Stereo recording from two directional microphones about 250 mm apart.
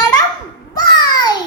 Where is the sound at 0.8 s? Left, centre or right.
Centre.